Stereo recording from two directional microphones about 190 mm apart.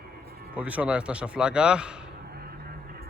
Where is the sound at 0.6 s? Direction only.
5° right (ahead or behind).